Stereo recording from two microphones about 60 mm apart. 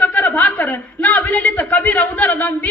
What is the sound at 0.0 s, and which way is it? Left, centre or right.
Speech, left.